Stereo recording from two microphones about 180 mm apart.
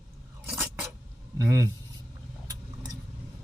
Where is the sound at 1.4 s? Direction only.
20° right (ahead or behind).